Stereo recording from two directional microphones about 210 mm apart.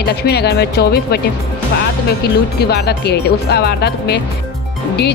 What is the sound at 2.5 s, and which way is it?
Speech, 50° left (ahead or behind).